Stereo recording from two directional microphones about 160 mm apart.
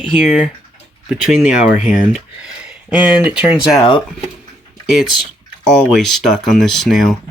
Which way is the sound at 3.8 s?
30° left (ahead or behind).